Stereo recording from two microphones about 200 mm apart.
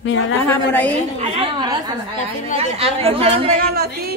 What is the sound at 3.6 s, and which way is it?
Speech, 50° right (ahead or behind).